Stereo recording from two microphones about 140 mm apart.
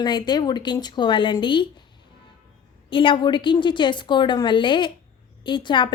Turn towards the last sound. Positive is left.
turn(degrees=35)  # may be behind; listen again after turning